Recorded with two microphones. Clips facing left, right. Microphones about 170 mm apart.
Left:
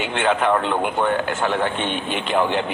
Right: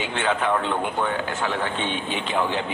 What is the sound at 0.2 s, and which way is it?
A man's voice, 60° left (ahead or behind).